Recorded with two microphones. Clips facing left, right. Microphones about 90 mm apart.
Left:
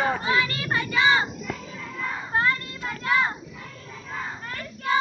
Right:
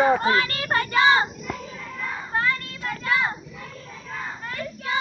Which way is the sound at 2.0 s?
5° left (ahead or behind).